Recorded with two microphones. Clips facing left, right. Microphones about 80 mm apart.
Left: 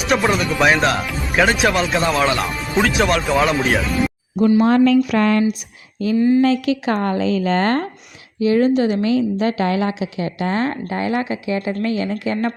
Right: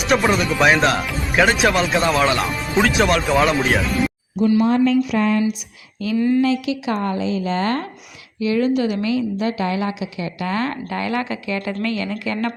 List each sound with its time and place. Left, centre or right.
0.0 s speech: centre
4.6 s a woman's voice: left
6.1 s speech: centre
6.4 s a woman's voice: left
8.4 s a woman's voice: left